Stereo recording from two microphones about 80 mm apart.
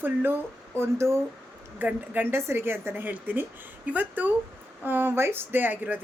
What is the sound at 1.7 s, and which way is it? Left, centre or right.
Speech, right.